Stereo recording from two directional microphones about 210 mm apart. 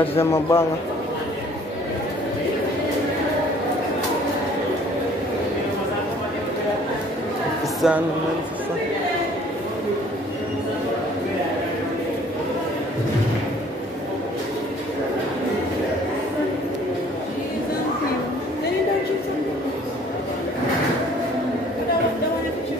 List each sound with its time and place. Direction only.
0.2 s a man's voice: 10° left (ahead or behind)
7.8 s speech: centre (ahead or behind)